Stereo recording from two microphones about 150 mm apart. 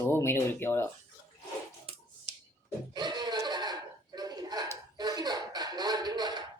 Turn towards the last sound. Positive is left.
turn(degrees=-30)  # may be behind; listen again after turning